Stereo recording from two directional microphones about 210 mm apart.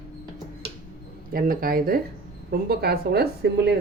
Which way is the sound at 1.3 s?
45° right (ahead or behind).